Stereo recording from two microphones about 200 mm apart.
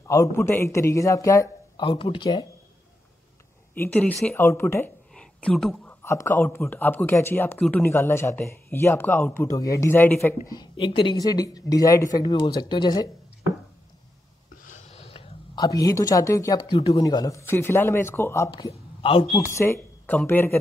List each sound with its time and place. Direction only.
0.0 s speech: 15° left (ahead or behind)
3.7 s speech: 10° left (ahead or behind)
6.0 s speech: 10° left (ahead or behind)
14.6 s a sound: 40° left (ahead or behind)
17.0 s speech: 15° left (ahead or behind)
18.5 s speech: 25° left (ahead or behind)
19.4 s speech: 15° left (ahead or behind)